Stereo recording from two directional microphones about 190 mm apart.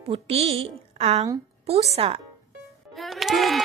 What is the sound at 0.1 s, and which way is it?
A woman's voice, 30° right (ahead or behind).